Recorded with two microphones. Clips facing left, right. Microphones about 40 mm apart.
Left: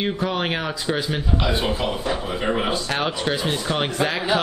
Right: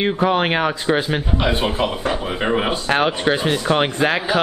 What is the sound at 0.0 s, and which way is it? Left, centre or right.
A man's voice, right.